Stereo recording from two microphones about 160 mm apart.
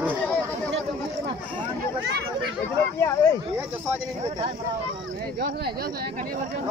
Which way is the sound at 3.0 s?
20° left (ahead or behind).